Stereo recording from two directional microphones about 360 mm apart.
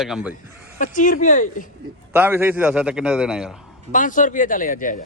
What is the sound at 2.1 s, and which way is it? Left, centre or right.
A man's voice, centre.